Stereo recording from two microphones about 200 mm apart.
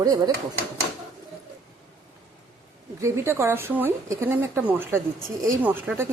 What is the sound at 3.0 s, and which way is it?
Speech, 15° right (ahead or behind).